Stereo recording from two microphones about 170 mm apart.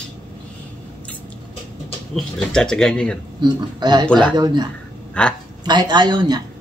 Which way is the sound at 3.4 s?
25° right (ahead or behind).